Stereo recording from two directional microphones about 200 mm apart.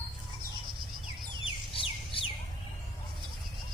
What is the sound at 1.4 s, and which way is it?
Chicken, 25° left (ahead or behind).